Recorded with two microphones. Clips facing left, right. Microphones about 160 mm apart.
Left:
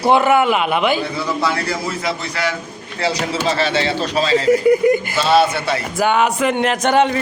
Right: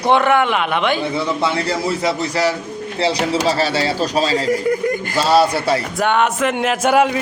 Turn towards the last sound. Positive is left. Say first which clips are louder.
# even
turn(degrees=-5)  # may be behind; listen again after turning